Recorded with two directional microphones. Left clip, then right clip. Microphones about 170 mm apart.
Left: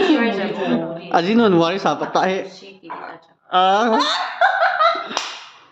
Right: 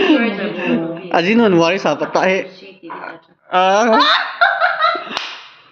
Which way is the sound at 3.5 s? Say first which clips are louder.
Right 3 dB; centre (ahead or behind).